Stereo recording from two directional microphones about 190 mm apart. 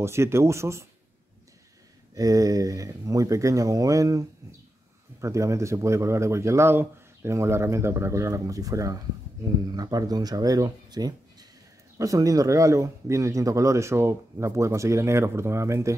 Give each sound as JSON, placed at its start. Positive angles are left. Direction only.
{"t": 0.0, "sound": "speech", "side_deg": -15}
{"t": 2.1, "sound": "speech", "side_deg": -20}